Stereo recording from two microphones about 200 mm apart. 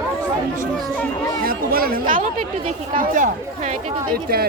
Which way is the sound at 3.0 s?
40° right (ahead or behind).